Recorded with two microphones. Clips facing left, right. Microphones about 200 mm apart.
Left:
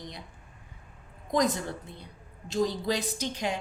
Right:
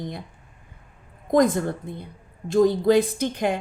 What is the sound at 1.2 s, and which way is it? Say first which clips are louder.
A woman's voice: right 8 dB; 50° right (ahead or behind).